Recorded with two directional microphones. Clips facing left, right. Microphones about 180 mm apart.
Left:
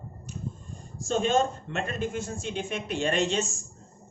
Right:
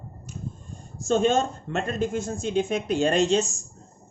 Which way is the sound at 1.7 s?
40° right (ahead or behind).